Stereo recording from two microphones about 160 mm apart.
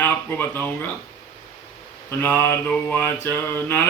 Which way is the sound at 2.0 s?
15° left (ahead or behind).